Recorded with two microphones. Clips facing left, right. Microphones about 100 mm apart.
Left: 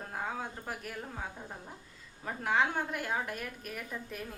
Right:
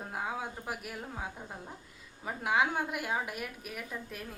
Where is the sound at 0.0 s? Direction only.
10° right (ahead or behind).